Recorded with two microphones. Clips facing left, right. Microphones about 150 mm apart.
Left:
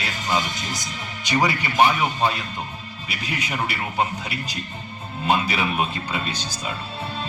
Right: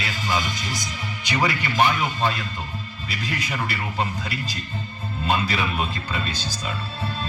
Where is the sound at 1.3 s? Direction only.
15° left (ahead or behind).